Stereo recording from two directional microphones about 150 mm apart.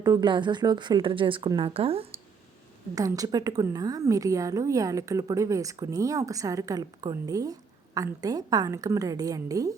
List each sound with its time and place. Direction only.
0.0 s a woman's voice: 25° right (ahead or behind)
2.9 s a woman's voice: 25° right (ahead or behind)